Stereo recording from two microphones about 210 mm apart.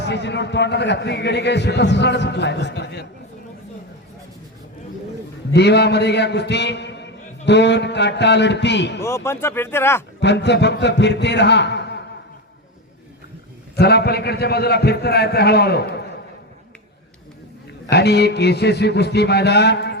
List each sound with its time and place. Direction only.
0.0 s a man's voice: 55° left (ahead or behind)
5.5 s a man's voice: 55° left (ahead or behind)
9.0 s speech: 15° left (ahead or behind)
10.2 s a man's voice: 55° left (ahead or behind)
13.7 s a man's voice: 50° left (ahead or behind)
17.8 s a man's voice: 50° left (ahead or behind)